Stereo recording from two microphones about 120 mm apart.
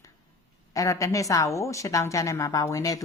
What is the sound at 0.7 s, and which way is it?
A woman's voice, 25° left (ahead or behind).